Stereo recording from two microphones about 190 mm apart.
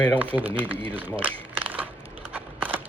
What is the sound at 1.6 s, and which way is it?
Crushing, 10° right (ahead or behind).